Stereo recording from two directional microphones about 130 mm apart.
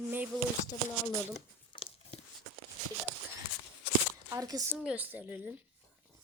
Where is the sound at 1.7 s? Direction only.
45° left (ahead or behind).